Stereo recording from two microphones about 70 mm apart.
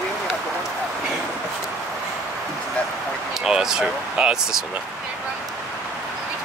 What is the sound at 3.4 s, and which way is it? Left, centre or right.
Speech, centre.